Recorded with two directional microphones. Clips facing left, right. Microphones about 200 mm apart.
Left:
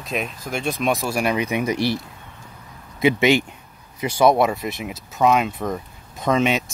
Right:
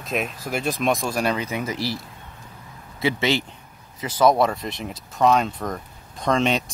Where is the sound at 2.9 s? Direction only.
15° left (ahead or behind).